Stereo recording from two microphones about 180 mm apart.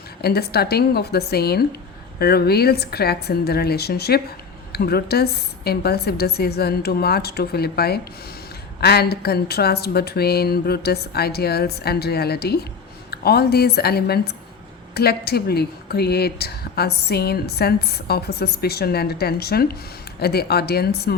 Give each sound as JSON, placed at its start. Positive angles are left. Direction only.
{"t": 0.2, "sound": "speech", "side_deg": 60}